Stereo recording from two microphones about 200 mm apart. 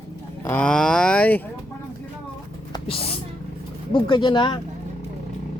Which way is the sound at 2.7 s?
30° left (ahead or behind).